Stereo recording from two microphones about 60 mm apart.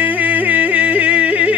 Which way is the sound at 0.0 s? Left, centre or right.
Right.